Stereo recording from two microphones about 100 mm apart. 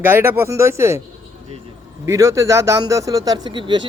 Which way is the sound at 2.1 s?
35° right (ahead or behind).